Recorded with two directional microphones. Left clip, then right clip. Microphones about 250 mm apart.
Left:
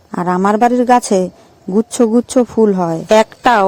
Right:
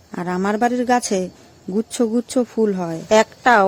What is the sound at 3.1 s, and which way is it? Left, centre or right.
Speech, left.